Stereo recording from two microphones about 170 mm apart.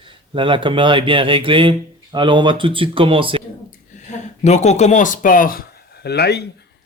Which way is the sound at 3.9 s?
45° left (ahead or behind).